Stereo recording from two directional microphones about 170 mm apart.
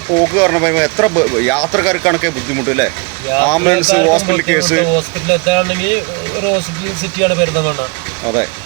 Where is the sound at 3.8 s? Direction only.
40° left (ahead or behind).